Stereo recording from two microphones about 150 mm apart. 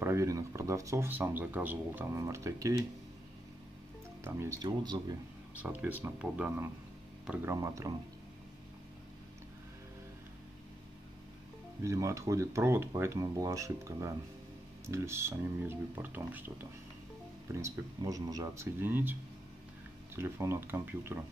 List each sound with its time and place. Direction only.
0.0 s speech: 20° right (ahead or behind)
4.2 s speech: 15° right (ahead or behind)
4.6 s speech: 30° right (ahead or behind)
5.6 s speech: 10° right (ahead or behind)
7.4 s speech: 20° right (ahead or behind)
11.8 s speech: 20° right (ahead or behind)
20.2 s speech: 15° right (ahead or behind)